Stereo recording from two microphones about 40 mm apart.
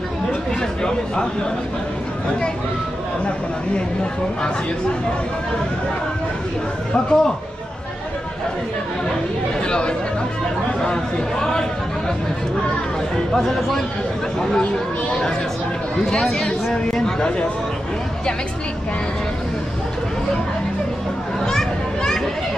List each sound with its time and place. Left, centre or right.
0.6 s a man's voice: centre
6.9 s a man's voice: centre
9.7 s a man's voice: left
13.4 s speech: centre
16.1 s speech: centre
21.5 s children playing: centre